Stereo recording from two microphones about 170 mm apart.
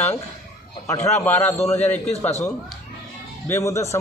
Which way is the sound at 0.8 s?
20° left (ahead or behind).